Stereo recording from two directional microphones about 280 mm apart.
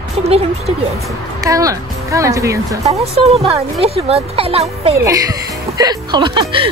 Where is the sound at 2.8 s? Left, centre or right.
Right.